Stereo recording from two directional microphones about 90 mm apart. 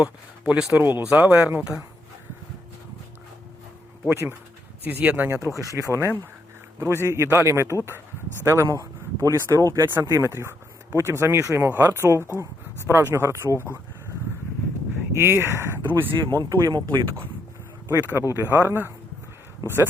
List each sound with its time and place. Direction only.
0.0 s speech: 10° right (ahead or behind)
0.9 s speech: 25° right (ahead or behind)
4.1 s speech: 30° right (ahead or behind)
5.4 s speech: 35° left (ahead or behind)
5.9 s speech: 30° right (ahead or behind)
7.8 s speech: 25° left (ahead or behind)
8.4 s speech: 30° right (ahead or behind)
15.1 s speech: 30° right (ahead or behind)
16.3 s speech: 45° right (ahead or behind)
16.8 s speech: 60° right (ahead or behind)
18.3 s speech: 25° right (ahead or behind)